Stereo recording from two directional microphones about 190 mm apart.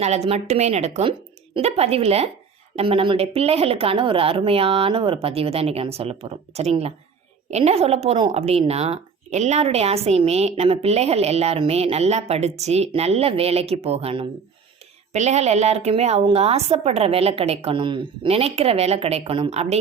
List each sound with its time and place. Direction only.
0.0 s a woman's voice: 35° right (ahead or behind)